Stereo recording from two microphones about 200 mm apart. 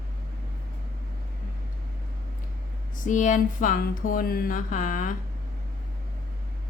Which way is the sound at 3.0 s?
40° left (ahead or behind).